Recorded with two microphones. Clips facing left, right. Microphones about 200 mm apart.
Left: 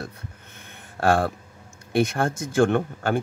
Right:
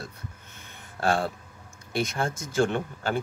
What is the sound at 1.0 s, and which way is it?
Speech, 55° left (ahead or behind).